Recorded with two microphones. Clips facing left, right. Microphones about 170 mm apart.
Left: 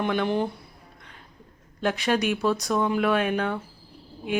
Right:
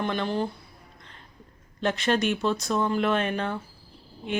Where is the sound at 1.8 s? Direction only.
5° left (ahead or behind).